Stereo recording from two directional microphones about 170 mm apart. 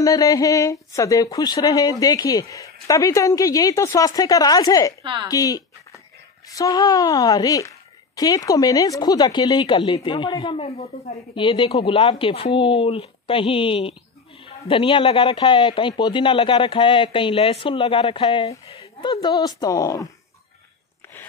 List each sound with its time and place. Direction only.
0.0 s speech: 20° left (ahead or behind)
5.0 s speech: 30° right (ahead or behind)
5.3 s speech: 20° left (ahead or behind)